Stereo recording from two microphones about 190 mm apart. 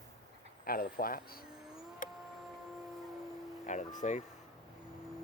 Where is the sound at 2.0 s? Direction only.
45° left (ahead or behind).